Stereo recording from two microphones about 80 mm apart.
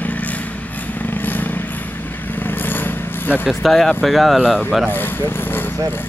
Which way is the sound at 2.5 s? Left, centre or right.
Left.